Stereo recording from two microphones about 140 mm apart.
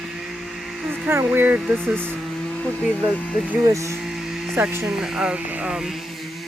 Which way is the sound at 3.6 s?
20° right (ahead or behind).